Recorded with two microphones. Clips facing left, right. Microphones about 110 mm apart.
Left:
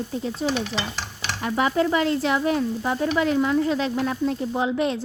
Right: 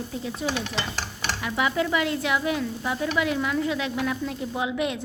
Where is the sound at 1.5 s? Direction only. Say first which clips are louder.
Left 4 dB; 40° left (ahead or behind).